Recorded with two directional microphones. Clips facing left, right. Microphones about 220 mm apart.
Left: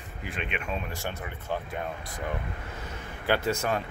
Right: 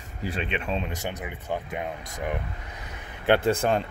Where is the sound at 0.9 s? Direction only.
20° right (ahead or behind).